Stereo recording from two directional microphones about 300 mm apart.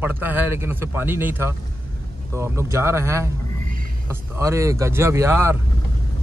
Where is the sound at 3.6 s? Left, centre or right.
Right.